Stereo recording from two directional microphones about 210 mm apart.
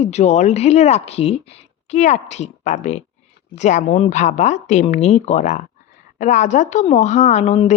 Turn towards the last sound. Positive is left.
turn(degrees=30)  # may be behind; listen again after turning